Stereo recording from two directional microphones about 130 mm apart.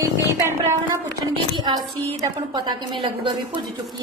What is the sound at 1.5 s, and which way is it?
A woman's voice, 30° right (ahead or behind).